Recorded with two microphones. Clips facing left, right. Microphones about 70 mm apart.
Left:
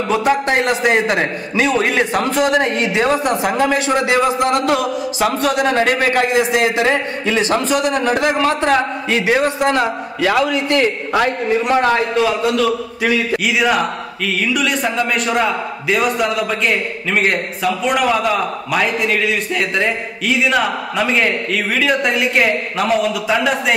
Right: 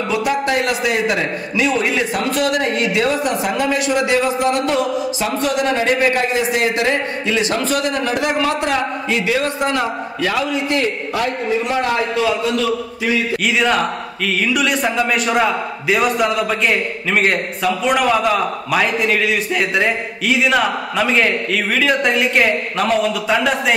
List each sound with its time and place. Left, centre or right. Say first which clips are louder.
0.1 s a man's voice: left 3 dB; left
5.7 s a man's voice: left 1 dB; left
7.9 s a man's voice: left 3 dB; left
10.5 s a man's voice: left 3 dB; left
13.5 s speech: even; centre